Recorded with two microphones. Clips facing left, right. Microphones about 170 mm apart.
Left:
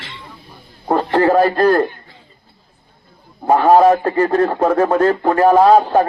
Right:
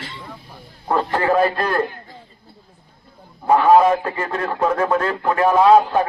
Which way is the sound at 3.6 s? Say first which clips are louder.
Left 3 dB; 35° left (ahead or behind).